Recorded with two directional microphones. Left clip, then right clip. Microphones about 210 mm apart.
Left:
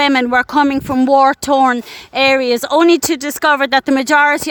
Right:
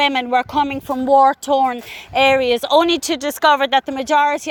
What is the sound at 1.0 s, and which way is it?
Speech, 25° left (ahead or behind).